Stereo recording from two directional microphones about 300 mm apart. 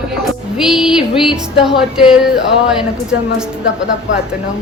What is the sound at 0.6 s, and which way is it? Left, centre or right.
A woman's voice, centre.